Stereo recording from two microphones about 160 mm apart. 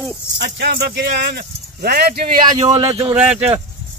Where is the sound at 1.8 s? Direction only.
80° right.